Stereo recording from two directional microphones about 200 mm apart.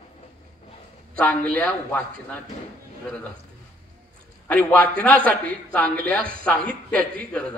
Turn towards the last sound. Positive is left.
turn(degrees=5)  # may be behind; listen again after turning